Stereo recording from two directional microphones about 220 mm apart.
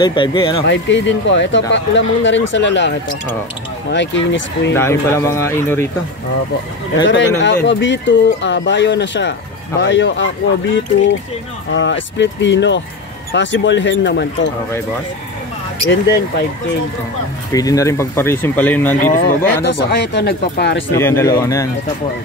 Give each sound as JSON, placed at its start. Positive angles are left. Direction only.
{"t": 0.0, "sound": "speech", "side_deg": 20}
{"t": 0.6, "sound": "speech", "side_deg": 55}
{"t": 3.9, "sound": "speech", "side_deg": 55}
{"t": 4.7, "sound": "speech", "side_deg": 10}
{"t": 7.1, "sound": "speech", "side_deg": 55}
{"t": 15.9, "sound": "speech", "side_deg": 50}
{"t": 17.5, "sound": "speech", "side_deg": 15}
{"t": 18.9, "sound": "speech", "side_deg": 40}
{"t": 20.9, "sound": "speech", "side_deg": 10}